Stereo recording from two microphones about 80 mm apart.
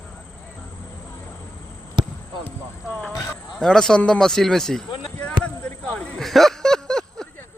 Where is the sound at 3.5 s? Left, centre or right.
Centre.